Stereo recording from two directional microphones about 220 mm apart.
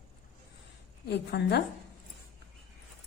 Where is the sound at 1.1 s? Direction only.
50° left (ahead or behind).